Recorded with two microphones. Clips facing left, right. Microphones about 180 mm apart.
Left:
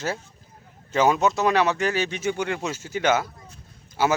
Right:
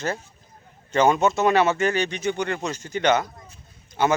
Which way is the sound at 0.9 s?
5° left (ahead or behind).